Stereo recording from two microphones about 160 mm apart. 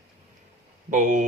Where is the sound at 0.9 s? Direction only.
50° right (ahead or behind).